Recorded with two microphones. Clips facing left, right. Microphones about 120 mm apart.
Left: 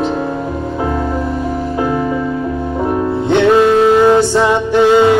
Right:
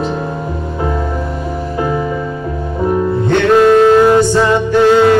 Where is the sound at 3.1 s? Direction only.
15° left (ahead or behind).